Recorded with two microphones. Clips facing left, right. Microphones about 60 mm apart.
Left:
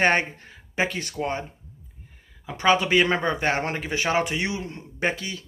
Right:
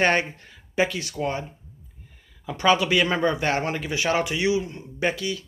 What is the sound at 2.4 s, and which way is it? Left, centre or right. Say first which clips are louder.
Speech: even; left.